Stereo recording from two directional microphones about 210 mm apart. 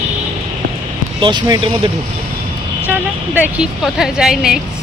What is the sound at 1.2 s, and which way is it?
Speech, 20° right (ahead or behind).